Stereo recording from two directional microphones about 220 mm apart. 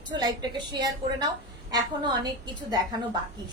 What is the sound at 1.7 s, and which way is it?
A woman's voice, 20° right (ahead or behind).